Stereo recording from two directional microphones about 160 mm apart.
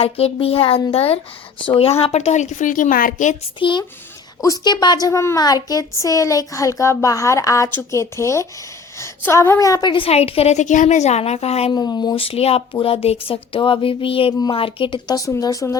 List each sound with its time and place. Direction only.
0.0 s a woman's voice: 40° left (ahead or behind); by 3.3 s 55° left (ahead or behind)
3.6 s a woman's voice: 30° left (ahead or behind)
11.7 s a woman's voice: 25° left (ahead or behind)